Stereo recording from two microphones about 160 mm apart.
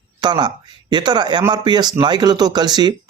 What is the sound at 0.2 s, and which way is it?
Speech, 25° right (ahead or behind).